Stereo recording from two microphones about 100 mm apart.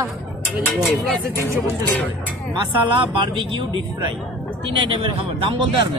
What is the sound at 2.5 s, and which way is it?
Speech, 55° right (ahead or behind).